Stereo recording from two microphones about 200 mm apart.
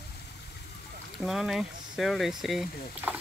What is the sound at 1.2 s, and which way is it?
Speech, centre (ahead or behind).